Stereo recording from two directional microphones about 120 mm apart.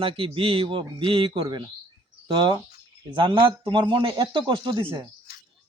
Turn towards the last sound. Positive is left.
turn(degrees=-40)  # may be behind; listen again after turning